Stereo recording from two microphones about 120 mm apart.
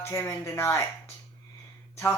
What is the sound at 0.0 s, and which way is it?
Speech, 20° left (ahead or behind).